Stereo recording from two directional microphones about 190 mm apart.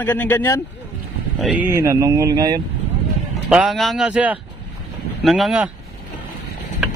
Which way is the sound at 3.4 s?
5° right (ahead or behind).